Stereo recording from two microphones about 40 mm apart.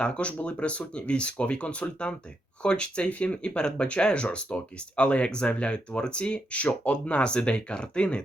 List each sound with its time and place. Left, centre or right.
0.0 s speech: left